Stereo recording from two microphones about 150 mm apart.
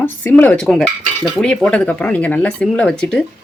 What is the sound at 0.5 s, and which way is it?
Cutlery, 5° left (ahead or behind).